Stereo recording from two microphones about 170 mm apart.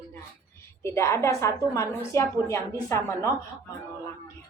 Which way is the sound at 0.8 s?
15° left (ahead or behind).